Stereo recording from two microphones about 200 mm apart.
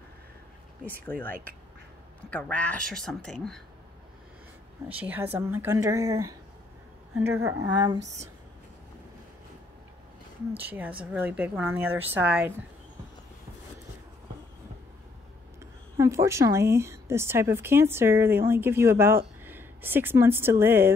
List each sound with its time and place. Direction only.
2.3 s speech: 5° left (ahead or behind)
4.8 s a woman's voice: 10° right (ahead or behind)
10.6 s a woman's voice: 10° right (ahead or behind)
16.0 s a woman's voice: 15° right (ahead or behind)